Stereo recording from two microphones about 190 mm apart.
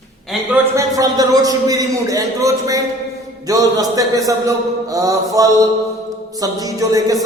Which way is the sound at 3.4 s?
20° right (ahead or behind).